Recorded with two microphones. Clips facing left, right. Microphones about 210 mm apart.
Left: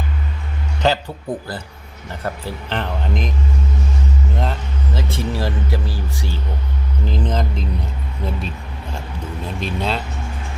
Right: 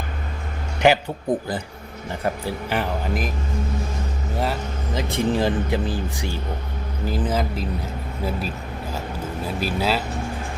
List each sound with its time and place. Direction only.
0.8 s speech: 15° right (ahead or behind)
4.9 s speech: 15° right (ahead or behind)